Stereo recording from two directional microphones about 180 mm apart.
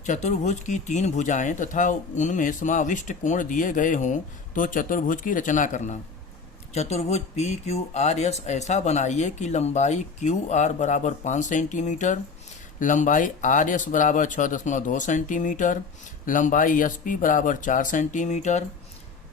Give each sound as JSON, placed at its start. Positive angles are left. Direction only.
{"t": 0.0, "sound": "speech", "side_deg": 40}